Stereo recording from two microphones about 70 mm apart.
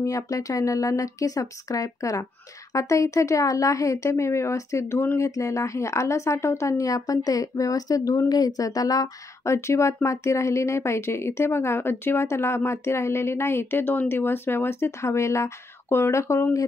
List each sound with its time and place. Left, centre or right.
0.0 s a woman's voice: left